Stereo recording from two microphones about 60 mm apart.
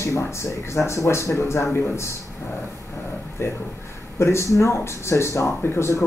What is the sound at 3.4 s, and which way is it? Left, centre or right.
Speech, left.